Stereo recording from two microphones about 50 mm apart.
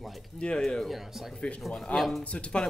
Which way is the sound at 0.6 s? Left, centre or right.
Centre.